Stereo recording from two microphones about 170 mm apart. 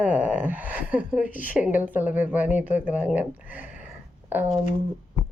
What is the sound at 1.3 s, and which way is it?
Speech, 50° left (ahead or behind).